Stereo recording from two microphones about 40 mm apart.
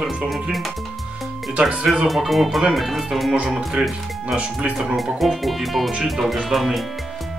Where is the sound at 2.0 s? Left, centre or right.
Centre.